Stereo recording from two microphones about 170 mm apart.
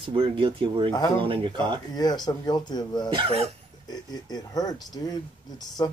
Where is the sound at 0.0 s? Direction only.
30° right (ahead or behind).